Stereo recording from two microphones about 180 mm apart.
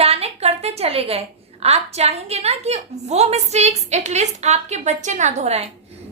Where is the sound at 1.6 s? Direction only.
35° right (ahead or behind).